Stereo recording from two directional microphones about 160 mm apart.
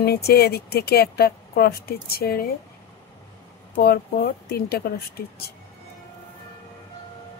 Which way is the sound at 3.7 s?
80° left.